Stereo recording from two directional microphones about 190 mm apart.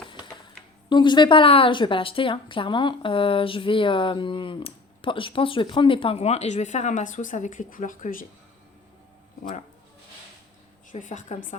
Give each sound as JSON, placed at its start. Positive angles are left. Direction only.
{"t": 0.9, "sound": "speech", "side_deg": 25}
{"t": 10.9, "sound": "a woman's voice", "side_deg": 40}